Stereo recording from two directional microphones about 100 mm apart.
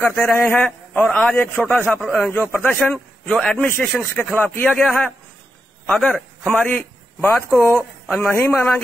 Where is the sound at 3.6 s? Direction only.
20° left (ahead or behind).